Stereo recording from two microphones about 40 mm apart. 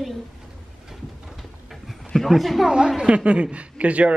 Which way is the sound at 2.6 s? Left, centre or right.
Centre.